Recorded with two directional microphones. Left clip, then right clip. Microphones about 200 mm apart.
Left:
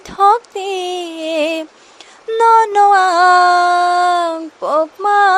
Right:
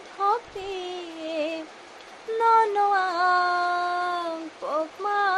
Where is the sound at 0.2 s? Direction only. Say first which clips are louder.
Left 13 dB; 55° left (ahead or behind).